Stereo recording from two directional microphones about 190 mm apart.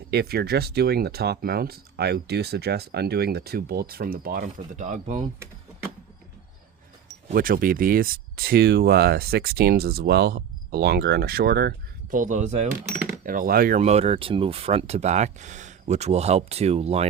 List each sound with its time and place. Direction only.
0.1 s speech: 55° right (ahead or behind); by 5.2 s 40° right (ahead or behind)
7.3 s speech: 50° right (ahead or behind)
12.1 s speech: 40° right (ahead or behind)